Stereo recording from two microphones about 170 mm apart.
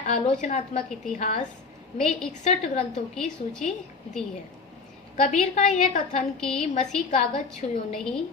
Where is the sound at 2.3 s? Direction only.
40° left (ahead or behind).